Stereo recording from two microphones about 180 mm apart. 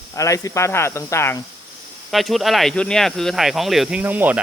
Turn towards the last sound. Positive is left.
turn(degrees=-10)  # may be behind; listen again after turning